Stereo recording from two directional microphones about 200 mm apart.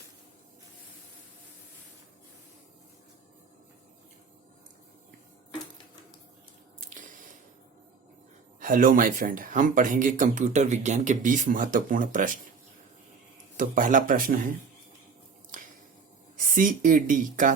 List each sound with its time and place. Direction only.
6.7 s squish: 40° right (ahead or behind)
8.6 s speech: 40° right (ahead or behind)
13.6 s speech: 40° right (ahead or behind)
15.5 s finger snapping: 40° right (ahead or behind)
16.4 s speech: 40° right (ahead or behind)